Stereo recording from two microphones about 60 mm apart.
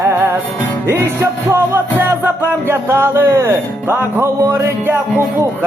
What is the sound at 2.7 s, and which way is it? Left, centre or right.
Speech, right.